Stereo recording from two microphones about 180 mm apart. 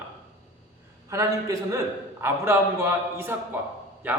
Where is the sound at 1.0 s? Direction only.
20° right (ahead or behind).